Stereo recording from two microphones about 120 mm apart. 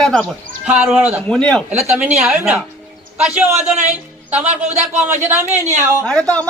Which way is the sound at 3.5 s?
70° right (ahead or behind).